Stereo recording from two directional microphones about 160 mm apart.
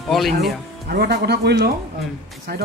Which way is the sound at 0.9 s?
90° right.